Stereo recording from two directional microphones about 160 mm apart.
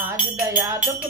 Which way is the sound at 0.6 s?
15° right (ahead or behind).